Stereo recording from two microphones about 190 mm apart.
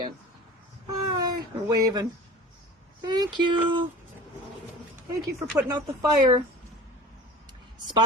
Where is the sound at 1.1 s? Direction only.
20° right (ahead or behind).